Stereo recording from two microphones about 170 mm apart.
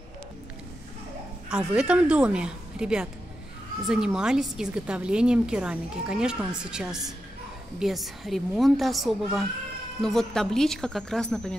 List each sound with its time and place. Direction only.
1.5 s a woman's voice: 5° right (ahead or behind)